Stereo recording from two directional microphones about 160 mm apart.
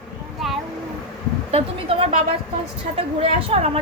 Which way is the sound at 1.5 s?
35° right (ahead or behind).